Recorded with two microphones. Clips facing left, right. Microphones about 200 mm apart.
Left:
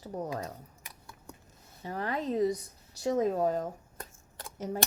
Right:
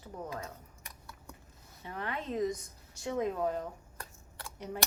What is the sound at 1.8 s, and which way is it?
Speech, 40° left (ahead or behind).